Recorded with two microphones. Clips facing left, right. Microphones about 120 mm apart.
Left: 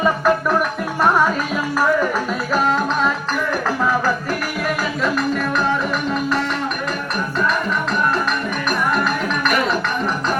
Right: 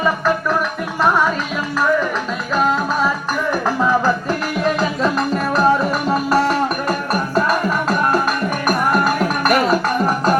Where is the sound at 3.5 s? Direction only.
15° right (ahead or behind).